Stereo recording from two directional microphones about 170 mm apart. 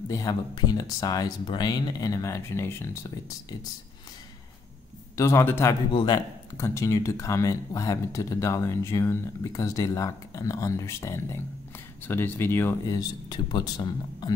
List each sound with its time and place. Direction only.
0.1 s speech: 20° left (ahead or behind)
5.1 s speech: 15° left (ahead or behind)
5.9 s speech: 25° left (ahead or behind)